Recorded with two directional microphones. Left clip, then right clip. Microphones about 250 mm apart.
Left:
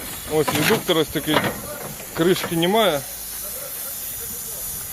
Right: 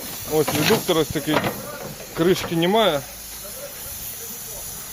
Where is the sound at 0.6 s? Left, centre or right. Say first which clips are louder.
Even; centre.